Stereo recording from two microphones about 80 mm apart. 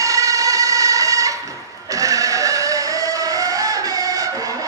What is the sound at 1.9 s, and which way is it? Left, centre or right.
Music, right.